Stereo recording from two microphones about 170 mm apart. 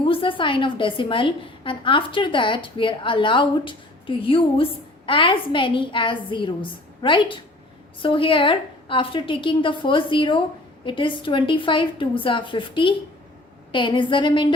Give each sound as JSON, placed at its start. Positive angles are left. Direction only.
{"t": 0.0, "sound": "a woman's voice", "side_deg": 30}